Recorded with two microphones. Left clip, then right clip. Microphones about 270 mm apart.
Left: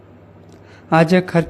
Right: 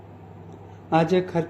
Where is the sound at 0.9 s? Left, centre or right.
Left.